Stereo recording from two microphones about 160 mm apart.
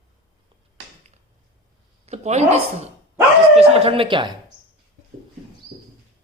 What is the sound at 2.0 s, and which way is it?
A woman's voice, 45° right (ahead or behind).